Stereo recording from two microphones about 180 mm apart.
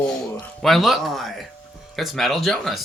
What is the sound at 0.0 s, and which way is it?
Speech, 5° left (ahead or behind).